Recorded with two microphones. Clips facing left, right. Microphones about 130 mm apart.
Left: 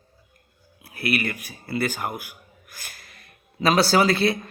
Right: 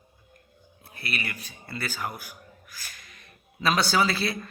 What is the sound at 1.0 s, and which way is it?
Speech, 55° left (ahead or behind).